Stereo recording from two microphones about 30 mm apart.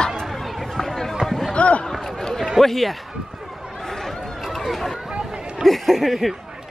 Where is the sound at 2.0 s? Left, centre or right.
Centre.